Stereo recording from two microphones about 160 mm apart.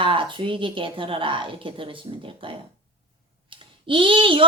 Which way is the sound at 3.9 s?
30° right (ahead or behind).